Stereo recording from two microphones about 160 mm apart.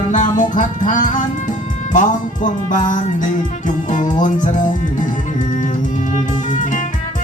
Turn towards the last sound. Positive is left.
turn(degrees=55)  # may be behind; listen again after turning